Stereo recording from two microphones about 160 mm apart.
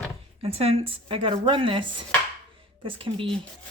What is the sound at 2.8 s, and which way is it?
Speech, 30° right (ahead or behind).